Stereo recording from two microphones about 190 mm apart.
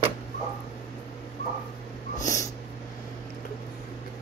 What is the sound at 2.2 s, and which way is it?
Dog, 15° left (ahead or behind).